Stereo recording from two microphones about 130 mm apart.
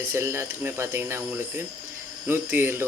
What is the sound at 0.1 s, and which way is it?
Speech, 20° right (ahead or behind).